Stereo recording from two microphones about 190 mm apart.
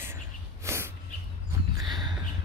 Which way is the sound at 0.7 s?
15° right (ahead or behind).